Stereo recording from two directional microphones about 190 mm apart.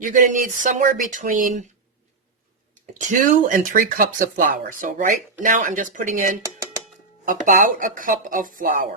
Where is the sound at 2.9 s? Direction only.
40° right (ahead or behind).